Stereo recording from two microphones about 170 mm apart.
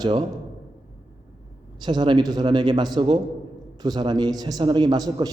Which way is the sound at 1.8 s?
30° right (ahead or behind).